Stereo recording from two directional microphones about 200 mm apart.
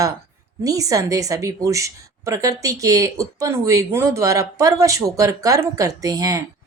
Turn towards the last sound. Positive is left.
turn(degrees=-15)  # may be behind; listen again after turning